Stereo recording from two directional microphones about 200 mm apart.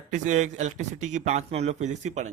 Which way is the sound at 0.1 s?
35° right (ahead or behind).